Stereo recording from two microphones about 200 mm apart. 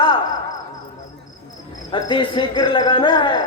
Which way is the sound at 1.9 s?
25° left (ahead or behind).